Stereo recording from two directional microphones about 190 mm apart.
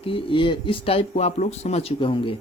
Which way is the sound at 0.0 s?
25° left (ahead or behind).